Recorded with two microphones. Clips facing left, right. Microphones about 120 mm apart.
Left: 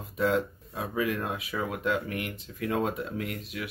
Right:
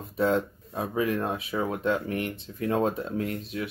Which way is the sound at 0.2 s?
30° right (ahead or behind).